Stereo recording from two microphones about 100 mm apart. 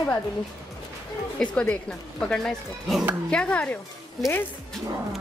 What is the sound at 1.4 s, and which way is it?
Speech, 10° left (ahead or behind).